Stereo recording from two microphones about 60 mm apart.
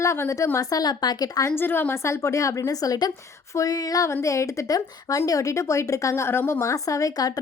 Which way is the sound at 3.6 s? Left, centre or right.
Left.